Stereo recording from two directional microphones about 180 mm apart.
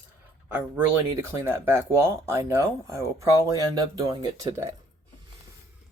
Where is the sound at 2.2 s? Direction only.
15° right (ahead or behind).